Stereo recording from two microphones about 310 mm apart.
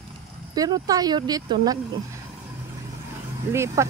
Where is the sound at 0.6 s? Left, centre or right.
Centre.